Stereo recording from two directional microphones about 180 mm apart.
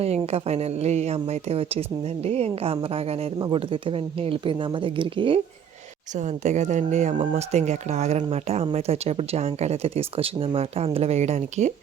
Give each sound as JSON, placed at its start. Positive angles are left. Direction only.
{"t": 0.0, "sound": "speech", "side_deg": -35}
{"t": 6.1, "sound": "speech", "side_deg": -40}